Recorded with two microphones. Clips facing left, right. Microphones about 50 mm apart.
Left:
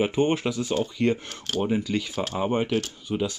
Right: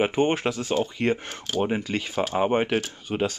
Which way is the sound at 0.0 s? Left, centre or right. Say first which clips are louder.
Right 1 dB; right.